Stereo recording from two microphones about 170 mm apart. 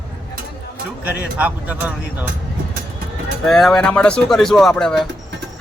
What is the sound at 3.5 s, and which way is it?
Speech, centre (ahead or behind).